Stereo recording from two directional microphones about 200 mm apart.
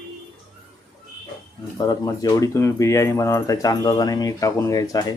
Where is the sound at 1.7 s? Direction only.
20° left (ahead or behind).